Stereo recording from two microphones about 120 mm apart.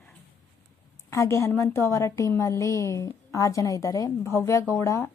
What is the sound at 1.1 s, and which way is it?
A woman's voice, 20° left (ahead or behind).